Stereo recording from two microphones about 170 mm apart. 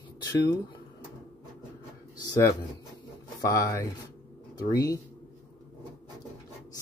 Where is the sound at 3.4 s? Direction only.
20° left (ahead or behind).